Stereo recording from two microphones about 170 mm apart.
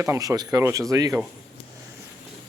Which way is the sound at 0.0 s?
20° right (ahead or behind).